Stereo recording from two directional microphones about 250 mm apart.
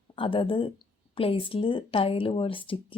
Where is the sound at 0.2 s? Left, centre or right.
Centre.